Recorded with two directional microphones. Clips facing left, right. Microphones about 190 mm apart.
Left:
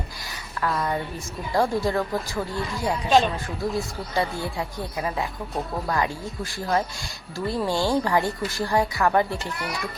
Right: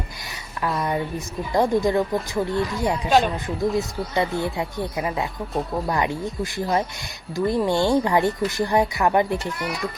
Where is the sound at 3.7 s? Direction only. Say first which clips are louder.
Right 3 dB; 20° right (ahead or behind).